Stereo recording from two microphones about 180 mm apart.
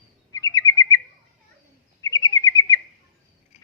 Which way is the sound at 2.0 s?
20° left (ahead or behind).